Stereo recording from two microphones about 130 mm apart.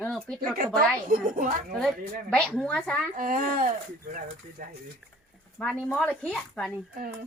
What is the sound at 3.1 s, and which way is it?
Speech, 90° right.